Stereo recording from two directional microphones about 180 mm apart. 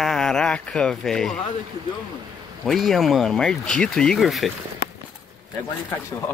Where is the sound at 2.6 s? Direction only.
Centre (ahead or behind).